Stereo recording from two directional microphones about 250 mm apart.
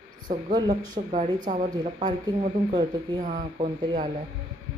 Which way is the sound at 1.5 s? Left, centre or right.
Right.